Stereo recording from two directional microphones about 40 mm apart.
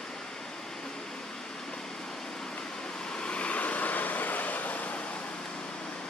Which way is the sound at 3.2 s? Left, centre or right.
Left.